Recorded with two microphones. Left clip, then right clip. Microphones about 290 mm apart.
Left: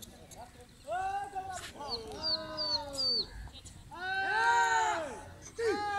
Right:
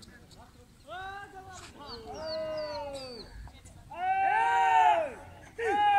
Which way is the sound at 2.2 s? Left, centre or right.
Centre.